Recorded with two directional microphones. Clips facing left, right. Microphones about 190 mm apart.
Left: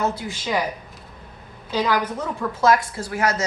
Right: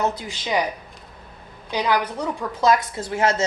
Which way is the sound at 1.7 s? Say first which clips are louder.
Even; 15° right (ahead or behind).